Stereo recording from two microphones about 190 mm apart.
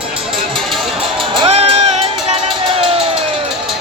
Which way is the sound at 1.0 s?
30° right (ahead or behind).